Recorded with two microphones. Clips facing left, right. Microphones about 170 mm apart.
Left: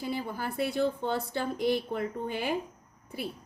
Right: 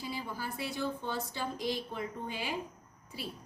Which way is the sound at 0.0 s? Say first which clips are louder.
Left 6 dB; 55° left (ahead or behind).